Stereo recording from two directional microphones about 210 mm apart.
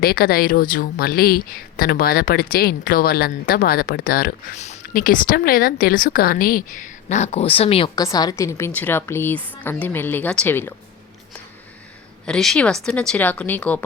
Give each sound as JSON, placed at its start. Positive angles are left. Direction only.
{"t": 0.0, "sound": "a woman's voice", "side_deg": 45}
{"t": 12.2, "sound": "a woman's voice", "side_deg": 0}